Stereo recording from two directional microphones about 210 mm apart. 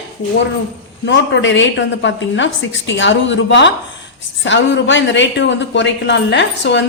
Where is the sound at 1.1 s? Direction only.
60° left (ahead or behind).